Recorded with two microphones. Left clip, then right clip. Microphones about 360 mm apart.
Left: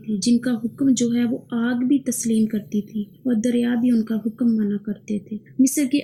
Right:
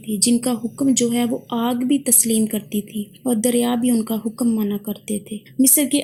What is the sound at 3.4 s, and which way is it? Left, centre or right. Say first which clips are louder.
Speech: right 3 dB; centre.